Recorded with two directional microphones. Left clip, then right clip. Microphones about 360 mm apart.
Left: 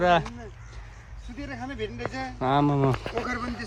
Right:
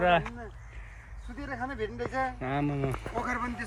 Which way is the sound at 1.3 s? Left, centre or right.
Centre.